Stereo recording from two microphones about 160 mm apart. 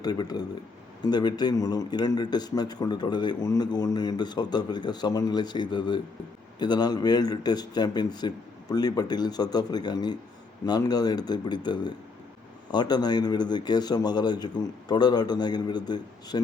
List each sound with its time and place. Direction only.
0.0 s a man's voice: 25° left (ahead or behind)